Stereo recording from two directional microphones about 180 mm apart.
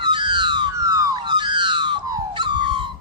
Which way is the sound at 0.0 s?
25° right (ahead or behind).